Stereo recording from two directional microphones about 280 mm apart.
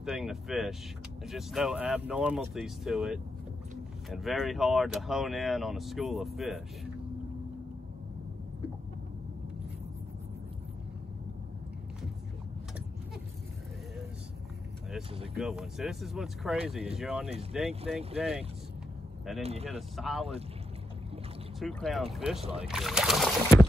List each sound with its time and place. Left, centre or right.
0.0 s speech: centre
15.3 s speech: centre
19.4 s speech: right
20.0 s speech: centre
21.5 s speech: centre
22.4 s speech: right
22.7 s speech: centre